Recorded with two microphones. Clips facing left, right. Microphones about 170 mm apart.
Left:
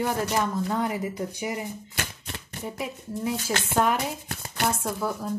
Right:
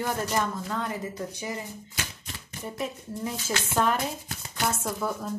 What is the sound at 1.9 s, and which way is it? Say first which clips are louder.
Shuffling cards: left 3 dB; 60° left (ahead or behind).